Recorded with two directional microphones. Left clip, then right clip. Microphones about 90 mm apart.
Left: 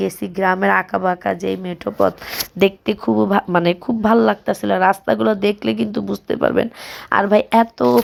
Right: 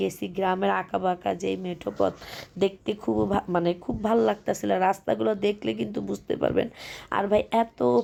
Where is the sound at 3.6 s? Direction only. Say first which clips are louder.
Left 9 dB; 45° left (ahead or behind).